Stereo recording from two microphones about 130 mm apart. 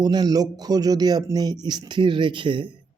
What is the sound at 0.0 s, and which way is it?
Speech, 30° right (ahead or behind).